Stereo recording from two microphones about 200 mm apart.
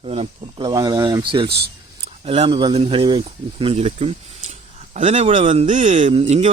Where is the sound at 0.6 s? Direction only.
20° right (ahead or behind).